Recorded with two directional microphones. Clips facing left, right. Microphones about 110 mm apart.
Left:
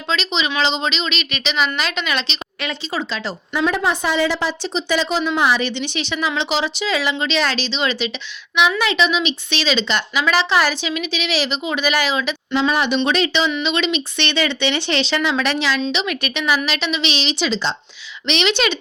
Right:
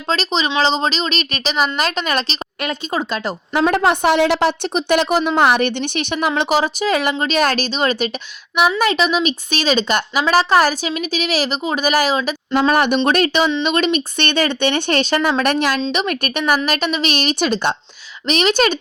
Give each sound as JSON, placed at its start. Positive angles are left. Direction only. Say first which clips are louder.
{"t": 0.1, "sound": "a woman's voice", "louder": "right 3 dB", "side_deg": -40}
{"t": 18.3, "sound": "a woman's voice", "louder": "right 3 dB", "side_deg": -45}